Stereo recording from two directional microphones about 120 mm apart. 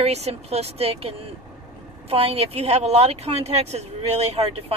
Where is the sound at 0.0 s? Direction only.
60° right (ahead or behind).